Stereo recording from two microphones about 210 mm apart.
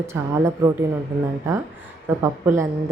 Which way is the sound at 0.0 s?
15° right (ahead or behind).